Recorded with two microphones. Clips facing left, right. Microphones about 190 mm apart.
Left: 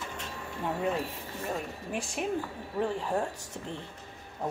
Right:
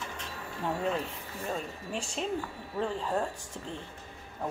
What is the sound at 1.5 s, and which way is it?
A woman's voice, 15° left (ahead or behind).